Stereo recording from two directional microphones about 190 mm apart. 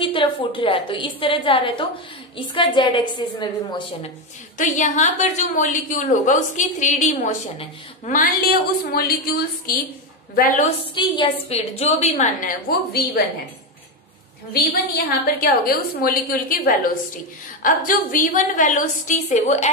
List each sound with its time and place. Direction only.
0.0 s a woman's voice: 25° left (ahead or behind)
4.6 s a woman's voice: 40° left (ahead or behind)
11.0 s a woman's voice: 25° left (ahead or behind); by 13.2 s 50° left (ahead or behind)
15.0 s a woman's voice: 50° left (ahead or behind)